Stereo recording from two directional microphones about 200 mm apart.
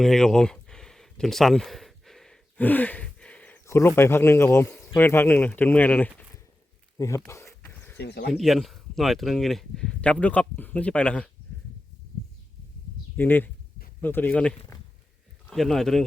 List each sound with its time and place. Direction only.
0.0 s a sound: centre (ahead or behind)
4.9 s speech: 10° left (ahead or behind)
7.2 s a sound: 15° left (ahead or behind)
7.9 s speech: 55° left (ahead or behind)
8.3 s speech: centre (ahead or behind)
13.1 s speech: 10° left (ahead or behind)